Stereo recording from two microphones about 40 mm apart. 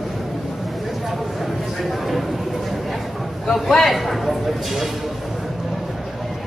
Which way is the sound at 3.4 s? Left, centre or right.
Centre.